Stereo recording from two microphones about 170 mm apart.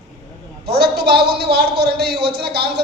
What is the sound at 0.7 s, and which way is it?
A man's voice, 70° right (ahead or behind).